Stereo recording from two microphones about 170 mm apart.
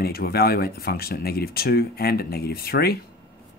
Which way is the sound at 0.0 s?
65° left (ahead or behind).